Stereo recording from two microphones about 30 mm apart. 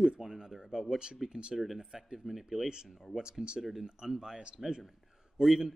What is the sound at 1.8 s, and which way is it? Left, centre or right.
Speech, centre.